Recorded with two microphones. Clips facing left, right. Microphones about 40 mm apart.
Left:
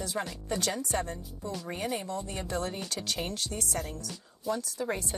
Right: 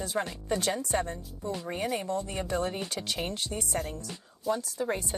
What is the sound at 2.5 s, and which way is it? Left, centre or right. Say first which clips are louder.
Speech: right 2 dB; right.